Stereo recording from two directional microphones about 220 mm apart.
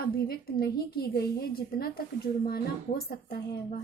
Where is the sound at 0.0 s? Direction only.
45° left (ahead or behind).